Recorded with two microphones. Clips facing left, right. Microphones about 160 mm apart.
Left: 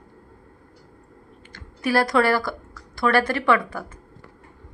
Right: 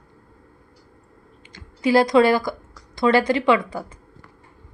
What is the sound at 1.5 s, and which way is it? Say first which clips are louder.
A woman's voice: right 4 dB; 20° right (ahead or behind).